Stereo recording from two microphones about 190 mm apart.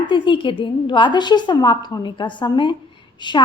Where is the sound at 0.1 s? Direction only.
25° left (ahead or behind).